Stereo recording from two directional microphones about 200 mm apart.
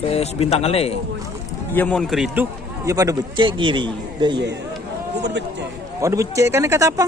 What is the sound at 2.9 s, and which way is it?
Speech, 15° right (ahead or behind).